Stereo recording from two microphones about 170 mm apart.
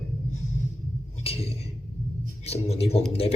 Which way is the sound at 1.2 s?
35° left (ahead or behind).